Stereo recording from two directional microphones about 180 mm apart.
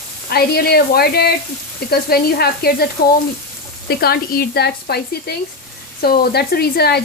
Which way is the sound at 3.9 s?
60° left (ahead or behind).